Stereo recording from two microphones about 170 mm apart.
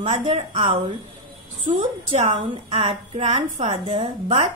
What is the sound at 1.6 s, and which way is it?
A woman's voice, 40° right (ahead or behind).